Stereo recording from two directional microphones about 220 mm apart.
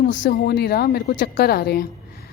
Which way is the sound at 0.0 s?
40° left (ahead or behind).